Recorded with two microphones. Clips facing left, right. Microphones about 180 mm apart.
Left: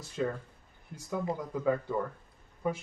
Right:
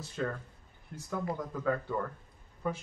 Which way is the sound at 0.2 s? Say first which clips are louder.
Left 3 dB; 15° left (ahead or behind).